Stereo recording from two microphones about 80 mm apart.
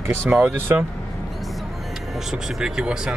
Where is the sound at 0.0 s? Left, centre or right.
Right.